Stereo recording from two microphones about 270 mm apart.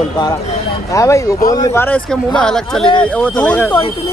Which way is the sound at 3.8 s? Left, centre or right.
Left.